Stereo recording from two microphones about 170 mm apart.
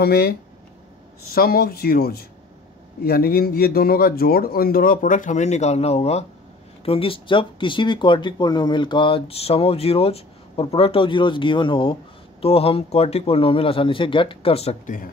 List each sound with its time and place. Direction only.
0.0 s speech: 70° left (ahead or behind); by 15.0 s 40° left (ahead or behind)